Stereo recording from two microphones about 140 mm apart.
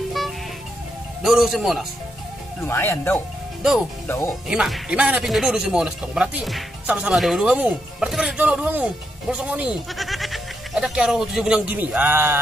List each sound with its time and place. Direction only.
1.2 s speech: centre (ahead or behind)
2.6 s speech: 15° left (ahead or behind)
4.5 s speech: 5° right (ahead or behind)